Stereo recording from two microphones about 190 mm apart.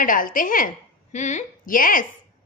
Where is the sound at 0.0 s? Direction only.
45° left (ahead or behind).